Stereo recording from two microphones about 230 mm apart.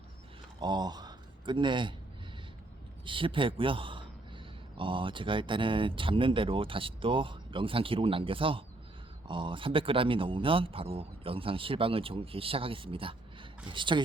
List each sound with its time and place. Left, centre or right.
0.6 s speech: centre
3.1 s a man's voice: right